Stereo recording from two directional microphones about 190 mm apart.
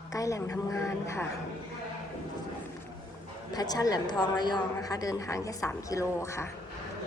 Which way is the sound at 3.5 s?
20° left (ahead or behind).